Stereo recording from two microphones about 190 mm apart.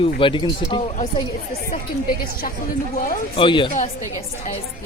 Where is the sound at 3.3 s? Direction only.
25° left (ahead or behind).